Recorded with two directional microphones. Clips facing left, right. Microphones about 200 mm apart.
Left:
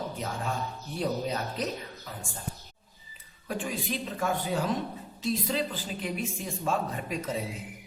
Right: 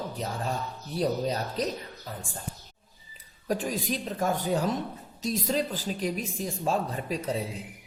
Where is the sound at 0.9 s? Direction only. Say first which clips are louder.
Right 3 dB; 35° right (ahead or behind).